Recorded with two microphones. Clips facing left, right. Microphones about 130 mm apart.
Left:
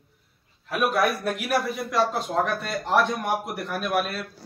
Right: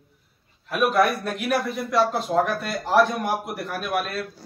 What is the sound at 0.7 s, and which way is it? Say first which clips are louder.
A man's voice: right 3 dB; centre (ahead or behind).